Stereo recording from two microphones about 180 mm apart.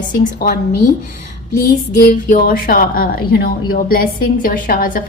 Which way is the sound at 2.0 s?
50° left (ahead or behind).